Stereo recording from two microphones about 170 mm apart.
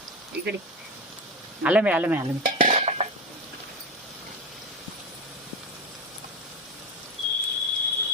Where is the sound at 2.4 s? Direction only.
50° right (ahead or behind).